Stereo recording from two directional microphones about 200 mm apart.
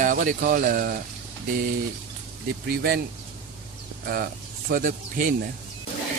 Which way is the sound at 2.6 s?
50° right (ahead or behind).